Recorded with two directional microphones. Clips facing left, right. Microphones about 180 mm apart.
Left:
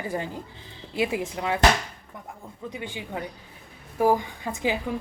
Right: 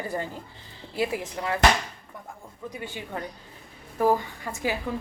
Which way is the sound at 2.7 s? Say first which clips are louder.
Left 1 dB; 20° left (ahead or behind).